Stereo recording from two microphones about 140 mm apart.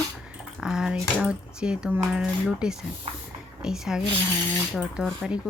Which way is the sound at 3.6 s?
5° right (ahead or behind).